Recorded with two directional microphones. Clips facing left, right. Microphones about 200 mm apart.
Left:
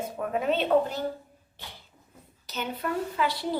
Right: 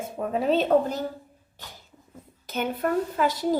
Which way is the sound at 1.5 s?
45° right (ahead or behind).